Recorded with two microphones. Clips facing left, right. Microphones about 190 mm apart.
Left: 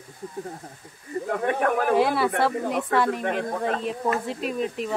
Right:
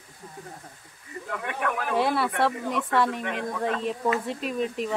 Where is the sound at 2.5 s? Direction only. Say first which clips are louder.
Left 2 dB; 45° left (ahead or behind).